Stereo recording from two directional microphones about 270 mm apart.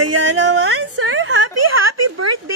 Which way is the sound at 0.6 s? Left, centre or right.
Right.